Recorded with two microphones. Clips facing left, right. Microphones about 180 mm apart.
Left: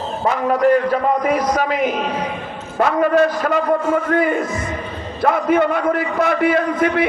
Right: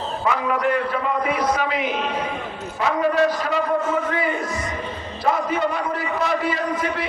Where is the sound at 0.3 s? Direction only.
40° left (ahead or behind).